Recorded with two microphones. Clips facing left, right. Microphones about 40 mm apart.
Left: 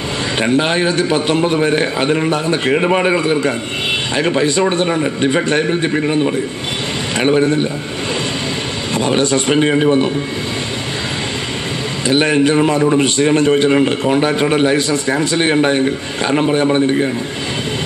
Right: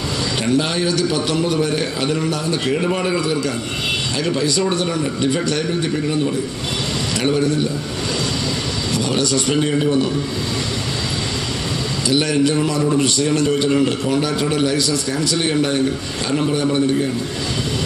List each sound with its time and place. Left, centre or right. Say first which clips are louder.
0.4 s a man's voice: left 5 dB; left
8.9 s a man's voice: left 5 dB; left
12.1 s a man's voice: left 4 dB; left